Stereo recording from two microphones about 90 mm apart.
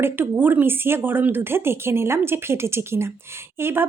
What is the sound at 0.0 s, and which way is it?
Speech, 20° right (ahead or behind).